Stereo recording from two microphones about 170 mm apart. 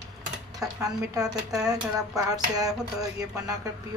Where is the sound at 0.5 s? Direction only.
20° right (ahead or behind).